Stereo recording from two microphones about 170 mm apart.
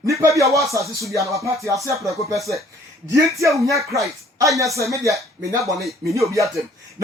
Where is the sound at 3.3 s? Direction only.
20° right (ahead or behind).